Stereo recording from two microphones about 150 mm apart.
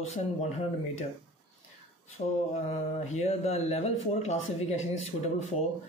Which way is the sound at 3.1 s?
45° left (ahead or behind).